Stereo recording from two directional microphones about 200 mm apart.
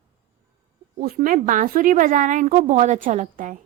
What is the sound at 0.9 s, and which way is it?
Speech, 45° right (ahead or behind).